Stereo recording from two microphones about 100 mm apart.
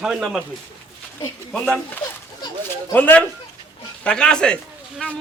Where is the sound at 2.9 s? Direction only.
15° left (ahead or behind).